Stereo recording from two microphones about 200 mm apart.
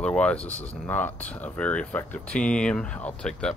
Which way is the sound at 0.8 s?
10° left (ahead or behind).